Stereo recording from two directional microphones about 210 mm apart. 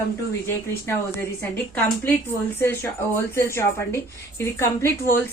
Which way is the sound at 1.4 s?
10° left (ahead or behind).